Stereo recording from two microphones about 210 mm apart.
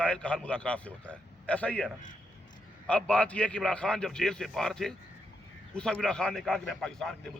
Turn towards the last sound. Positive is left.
turn(degrees=5)  # may be behind; listen again after turning